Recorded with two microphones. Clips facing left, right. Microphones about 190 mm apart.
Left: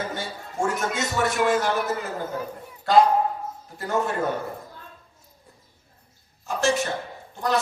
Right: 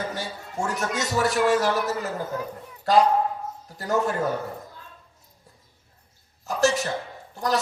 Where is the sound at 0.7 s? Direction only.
40° right (ahead or behind).